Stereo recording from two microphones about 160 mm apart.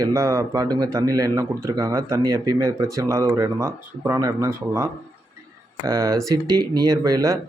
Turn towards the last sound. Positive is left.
turn(degrees=-20)  # may be behind; listen again after turning